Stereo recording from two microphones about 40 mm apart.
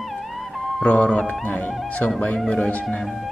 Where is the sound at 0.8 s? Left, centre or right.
Left.